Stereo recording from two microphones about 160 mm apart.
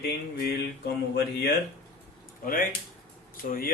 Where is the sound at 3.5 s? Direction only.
65° left (ahead or behind).